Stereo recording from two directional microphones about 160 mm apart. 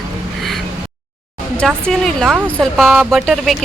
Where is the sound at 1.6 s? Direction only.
5° left (ahead or behind).